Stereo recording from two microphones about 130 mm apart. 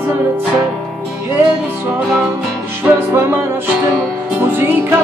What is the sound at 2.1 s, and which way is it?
Music, 5° right (ahead or behind).